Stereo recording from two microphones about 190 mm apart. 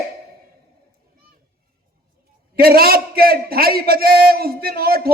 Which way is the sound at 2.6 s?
50° right (ahead or behind).